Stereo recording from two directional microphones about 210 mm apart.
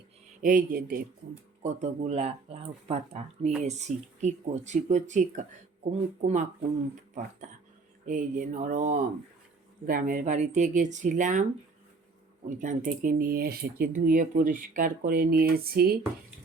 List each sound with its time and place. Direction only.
0.4 s speech: 40° right (ahead or behind)
1.6 s speech: 30° right (ahead or behind)
12.5 s speech: 40° right (ahead or behind)